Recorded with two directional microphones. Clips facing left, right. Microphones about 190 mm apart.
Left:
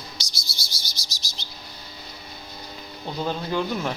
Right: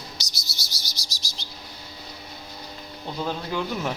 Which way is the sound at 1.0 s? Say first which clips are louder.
Right 1 dB; 35° right (ahead or behind).